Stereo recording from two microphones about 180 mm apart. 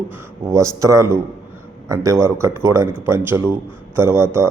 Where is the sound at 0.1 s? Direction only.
15° right (ahead or behind).